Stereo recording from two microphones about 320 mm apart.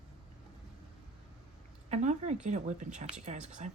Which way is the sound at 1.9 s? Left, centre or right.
Right.